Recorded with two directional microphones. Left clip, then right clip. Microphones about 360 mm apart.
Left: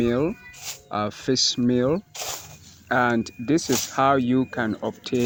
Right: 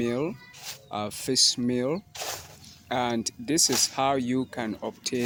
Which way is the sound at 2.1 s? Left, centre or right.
Centre.